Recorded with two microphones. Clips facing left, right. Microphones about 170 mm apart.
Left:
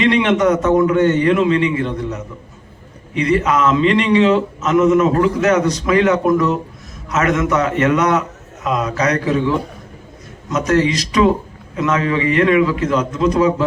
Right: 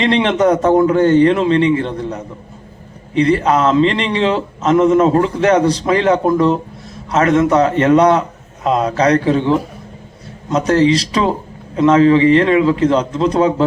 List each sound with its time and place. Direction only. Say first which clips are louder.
0.0 s a man's voice: right 1 dB; 30° right (ahead or behind)